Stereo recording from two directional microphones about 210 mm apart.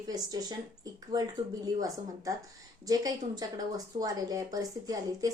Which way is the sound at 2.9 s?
20° right (ahead or behind).